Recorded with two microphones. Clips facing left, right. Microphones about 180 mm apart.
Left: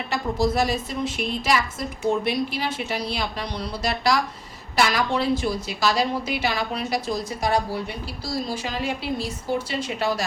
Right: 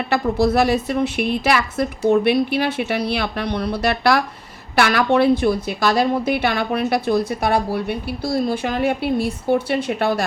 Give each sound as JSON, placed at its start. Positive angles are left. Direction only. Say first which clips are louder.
{"t": 0.1, "sound": "a woman's voice", "louder": "right 5 dB", "side_deg": -65}